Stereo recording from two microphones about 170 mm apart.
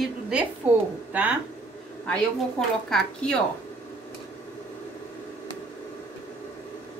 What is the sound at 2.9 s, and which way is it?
Speech, 5° left (ahead or behind).